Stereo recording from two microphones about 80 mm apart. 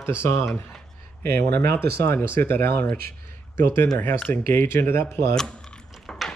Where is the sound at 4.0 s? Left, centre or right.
Left.